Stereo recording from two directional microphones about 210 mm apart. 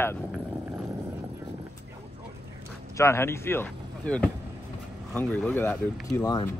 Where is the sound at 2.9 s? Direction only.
10° left (ahead or behind).